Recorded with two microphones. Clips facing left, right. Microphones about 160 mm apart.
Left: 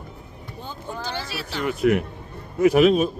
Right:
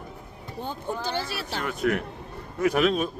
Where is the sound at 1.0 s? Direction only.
55° right (ahead or behind).